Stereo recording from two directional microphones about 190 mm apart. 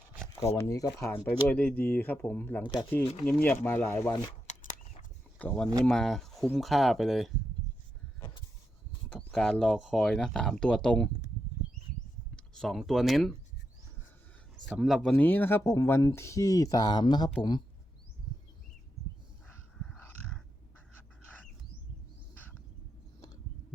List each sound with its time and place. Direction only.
0.4 s speech: 15° left (ahead or behind)
5.4 s speech: 10° left (ahead or behind)
9.0 s speech: 5° left (ahead or behind)
12.5 s speech: centre (ahead or behind)
14.7 s speech: centre (ahead or behind); by 17.3 s 20° left (ahead or behind)
19.5 s dog: 5° left (ahead or behind)